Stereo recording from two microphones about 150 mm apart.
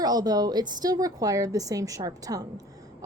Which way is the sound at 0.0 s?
25° right (ahead or behind).